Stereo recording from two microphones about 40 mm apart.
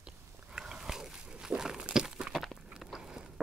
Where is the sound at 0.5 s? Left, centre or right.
Centre.